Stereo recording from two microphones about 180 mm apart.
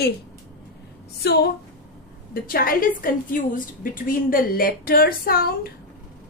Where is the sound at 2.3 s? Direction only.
55° left (ahead or behind).